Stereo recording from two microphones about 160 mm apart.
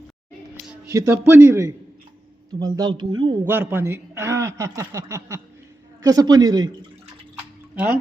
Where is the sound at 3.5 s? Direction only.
15° right (ahead or behind).